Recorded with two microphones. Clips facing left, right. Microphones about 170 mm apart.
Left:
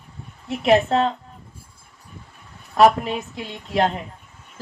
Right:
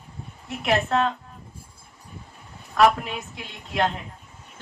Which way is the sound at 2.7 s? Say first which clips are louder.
Left 4 dB; 35° left (ahead or behind).